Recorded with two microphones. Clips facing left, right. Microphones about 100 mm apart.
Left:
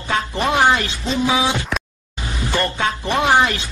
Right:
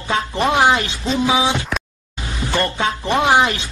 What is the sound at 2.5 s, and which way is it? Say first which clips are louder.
Speech: right 1 dB; 20° right (ahead or behind).